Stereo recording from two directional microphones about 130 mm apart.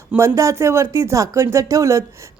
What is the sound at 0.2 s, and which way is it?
Speech, 20° right (ahead or behind).